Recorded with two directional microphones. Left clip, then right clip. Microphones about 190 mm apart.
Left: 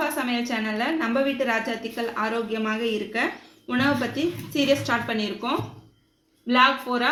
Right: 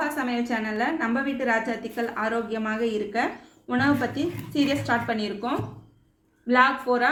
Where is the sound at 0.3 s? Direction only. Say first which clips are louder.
Left 1 dB; 40° left (ahead or behind).